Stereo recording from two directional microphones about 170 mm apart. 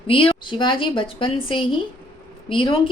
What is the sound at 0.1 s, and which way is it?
A woman's voice, 30° left (ahead or behind).